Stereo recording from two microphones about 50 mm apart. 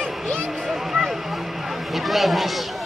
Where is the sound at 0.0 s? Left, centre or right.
Centre.